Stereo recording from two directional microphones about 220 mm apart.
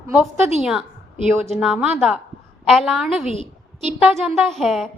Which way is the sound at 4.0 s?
Centre (ahead or behind).